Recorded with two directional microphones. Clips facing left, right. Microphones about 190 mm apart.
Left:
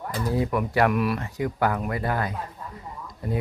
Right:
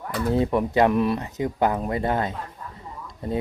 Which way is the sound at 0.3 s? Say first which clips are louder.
Right 4 dB; 25° right (ahead or behind).